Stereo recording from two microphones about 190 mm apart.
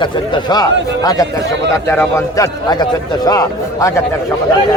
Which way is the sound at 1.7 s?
15° left (ahead or behind).